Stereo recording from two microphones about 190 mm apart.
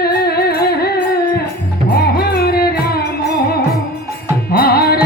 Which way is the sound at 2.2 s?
55° left (ahead or behind).